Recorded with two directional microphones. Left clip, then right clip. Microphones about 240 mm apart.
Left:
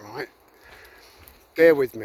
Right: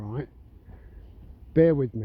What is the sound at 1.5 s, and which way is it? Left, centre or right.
Speech, centre.